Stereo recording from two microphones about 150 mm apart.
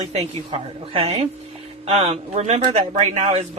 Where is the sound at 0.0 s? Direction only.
45° right (ahead or behind).